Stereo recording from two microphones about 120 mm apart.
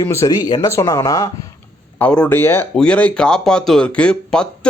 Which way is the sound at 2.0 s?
10° left (ahead or behind).